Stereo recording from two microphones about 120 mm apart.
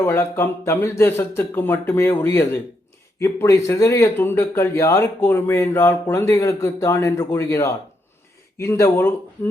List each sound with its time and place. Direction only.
0.0 s speech: 20° left (ahead or behind)